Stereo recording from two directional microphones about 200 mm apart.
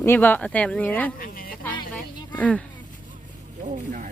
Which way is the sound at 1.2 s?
45° left (ahead or behind).